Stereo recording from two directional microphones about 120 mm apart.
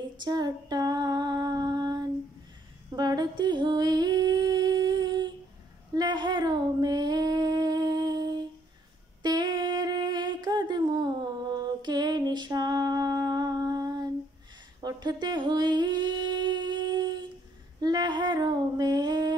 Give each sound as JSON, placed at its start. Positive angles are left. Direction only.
{"t": 0.2, "sound": "female singing", "side_deg": -35}
{"t": 3.0, "sound": "music", "side_deg": -35}
{"t": 5.9, "sound": "female singing", "side_deg": -40}
{"t": 9.2, "sound": "humming", "side_deg": -35}
{"t": 11.8, "sound": "a sound", "side_deg": -35}
{"t": 14.8, "sound": "humming", "side_deg": -35}
{"t": 17.7, "sound": "female singing", "side_deg": -35}